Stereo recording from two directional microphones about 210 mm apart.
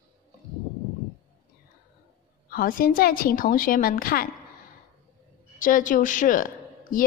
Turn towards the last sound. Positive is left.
turn(degrees=40)  # may be behind; listen again after turning